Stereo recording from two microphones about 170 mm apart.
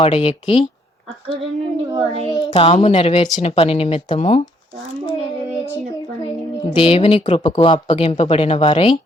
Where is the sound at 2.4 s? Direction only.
30° left (ahead or behind).